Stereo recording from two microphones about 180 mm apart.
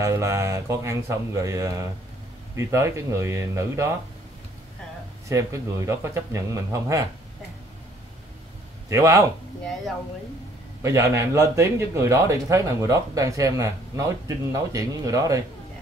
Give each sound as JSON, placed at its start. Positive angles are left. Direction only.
{"t": 0.0, "sound": "a man's voice", "side_deg": -15}
{"t": 5.3, "sound": "a man's voice", "side_deg": -20}
{"t": 8.8, "sound": "speech", "side_deg": -15}
{"t": 10.8, "sound": "a man's voice", "side_deg": -15}